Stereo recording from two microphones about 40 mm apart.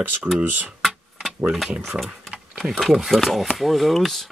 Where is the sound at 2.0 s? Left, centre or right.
Right.